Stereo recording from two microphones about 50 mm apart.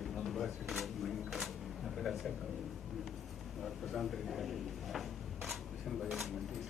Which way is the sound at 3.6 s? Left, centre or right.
Centre.